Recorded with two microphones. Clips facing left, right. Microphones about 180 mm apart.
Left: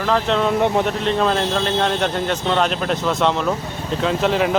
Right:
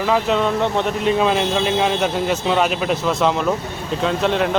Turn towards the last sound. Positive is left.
turn(degrees=0)  # may be behind; listen again after turning